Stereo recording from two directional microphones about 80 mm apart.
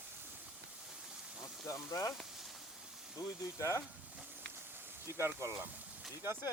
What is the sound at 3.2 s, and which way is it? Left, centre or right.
Speech, left.